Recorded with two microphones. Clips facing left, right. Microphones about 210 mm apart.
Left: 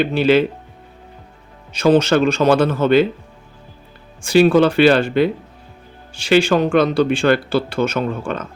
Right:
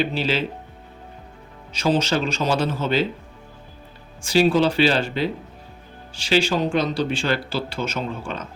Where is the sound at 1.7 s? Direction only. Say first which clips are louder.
Left 7 dB; 55° left (ahead or behind).